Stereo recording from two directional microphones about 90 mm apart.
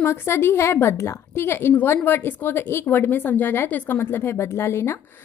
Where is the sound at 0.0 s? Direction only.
25° left (ahead or behind).